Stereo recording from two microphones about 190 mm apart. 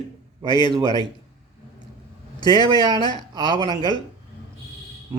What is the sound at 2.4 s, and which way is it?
Speech, 20° left (ahead or behind).